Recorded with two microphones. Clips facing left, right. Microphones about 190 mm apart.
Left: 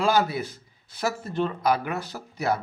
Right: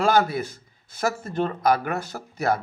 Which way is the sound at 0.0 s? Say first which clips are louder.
Right 2 dB; 50° right (ahead or behind).